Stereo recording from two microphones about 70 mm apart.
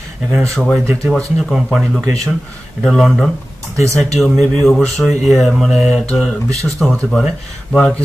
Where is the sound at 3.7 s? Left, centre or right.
Right.